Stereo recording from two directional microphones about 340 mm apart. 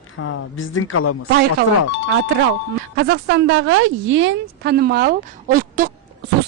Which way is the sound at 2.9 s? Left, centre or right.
Right.